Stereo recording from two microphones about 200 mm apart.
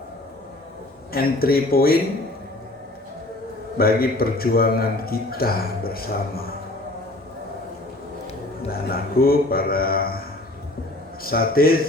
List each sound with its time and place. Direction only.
1.1 s a man's voice: 50° left (ahead or behind)
3.8 s a man's voice: 50° left (ahead or behind)
8.7 s a man's voice: 50° left (ahead or behind)
11.2 s a man's voice: 50° left (ahead or behind)